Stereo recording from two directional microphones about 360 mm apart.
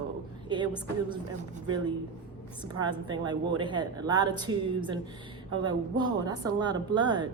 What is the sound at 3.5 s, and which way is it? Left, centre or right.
Speech, centre.